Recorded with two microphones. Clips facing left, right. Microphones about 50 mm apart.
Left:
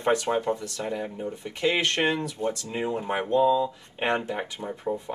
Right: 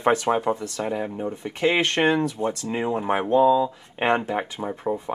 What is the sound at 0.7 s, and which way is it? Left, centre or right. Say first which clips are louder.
Speech: right 4 dB; right.